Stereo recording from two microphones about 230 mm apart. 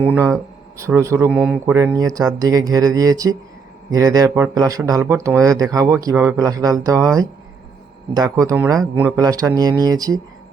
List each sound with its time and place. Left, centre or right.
0.0 s speech: centre